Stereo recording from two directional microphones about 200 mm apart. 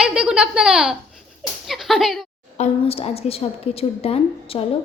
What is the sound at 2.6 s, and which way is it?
A woman's voice, 30° left (ahead or behind).